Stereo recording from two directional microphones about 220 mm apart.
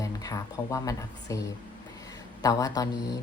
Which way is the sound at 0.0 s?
15° left (ahead or behind).